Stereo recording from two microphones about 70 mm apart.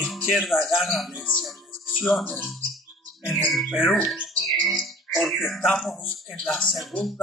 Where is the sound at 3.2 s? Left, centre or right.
Left.